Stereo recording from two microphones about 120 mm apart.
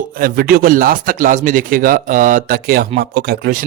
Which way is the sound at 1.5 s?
90° right.